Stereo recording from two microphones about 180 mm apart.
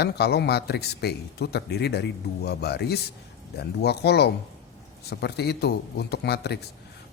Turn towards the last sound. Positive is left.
turn(degrees=65)  # may be behind; listen again after turning